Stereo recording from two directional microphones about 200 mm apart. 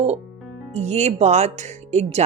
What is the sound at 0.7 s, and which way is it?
Speech, 35° right (ahead or behind).